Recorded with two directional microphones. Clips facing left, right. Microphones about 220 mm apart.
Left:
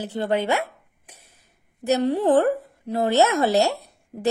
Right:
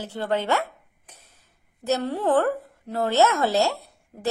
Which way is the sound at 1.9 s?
15° left (ahead or behind).